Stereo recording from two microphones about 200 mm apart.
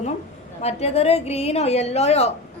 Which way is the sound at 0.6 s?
30° left (ahead or behind).